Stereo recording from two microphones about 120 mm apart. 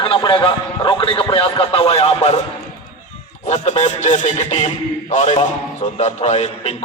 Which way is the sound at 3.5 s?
70° left (ahead or behind).